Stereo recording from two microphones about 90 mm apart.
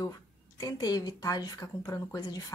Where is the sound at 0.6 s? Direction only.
45° left (ahead or behind).